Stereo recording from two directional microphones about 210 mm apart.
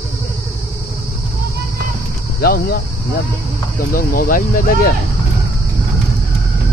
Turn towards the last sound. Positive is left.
turn(degrees=40)  # may be behind; listen again after turning